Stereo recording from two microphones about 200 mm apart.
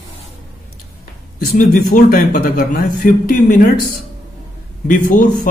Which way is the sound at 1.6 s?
45° left (ahead or behind).